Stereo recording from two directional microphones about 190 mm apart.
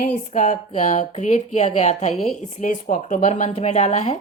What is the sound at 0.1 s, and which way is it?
A woman's voice, 40° left (ahead or behind).